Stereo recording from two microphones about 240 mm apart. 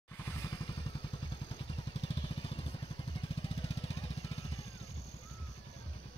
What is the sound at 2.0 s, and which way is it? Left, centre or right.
Vehicle, left.